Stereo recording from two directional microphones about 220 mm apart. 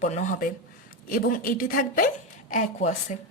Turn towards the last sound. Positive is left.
turn(degrees=30)  # may be behind; listen again after turning